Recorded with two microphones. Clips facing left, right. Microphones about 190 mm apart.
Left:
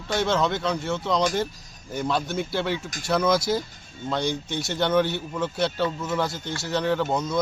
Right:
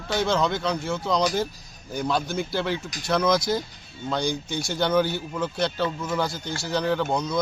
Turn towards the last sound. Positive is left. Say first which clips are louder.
# even
turn(degrees=5)  # may be behind; listen again after turning